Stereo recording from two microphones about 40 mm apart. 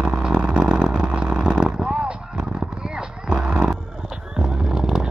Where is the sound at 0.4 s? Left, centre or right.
Right.